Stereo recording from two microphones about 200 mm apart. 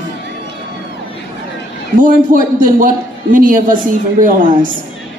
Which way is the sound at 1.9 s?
40° right (ahead or behind).